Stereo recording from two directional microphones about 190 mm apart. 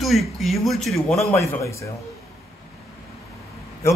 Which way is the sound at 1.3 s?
15° left (ahead or behind).